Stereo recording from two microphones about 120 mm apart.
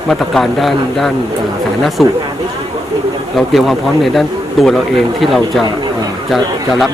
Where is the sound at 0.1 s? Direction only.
Centre (ahead or behind).